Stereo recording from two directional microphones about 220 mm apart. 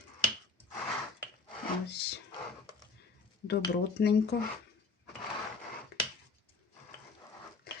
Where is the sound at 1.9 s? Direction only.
50° left (ahead or behind).